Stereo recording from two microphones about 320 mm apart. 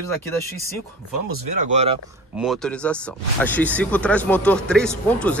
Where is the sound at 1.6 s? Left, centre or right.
Right.